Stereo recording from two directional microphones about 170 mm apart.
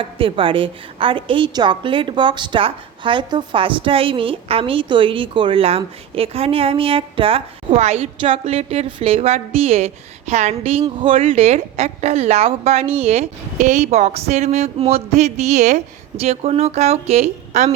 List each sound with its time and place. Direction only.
0.0 s a woman's voice: 30° right (ahead or behind)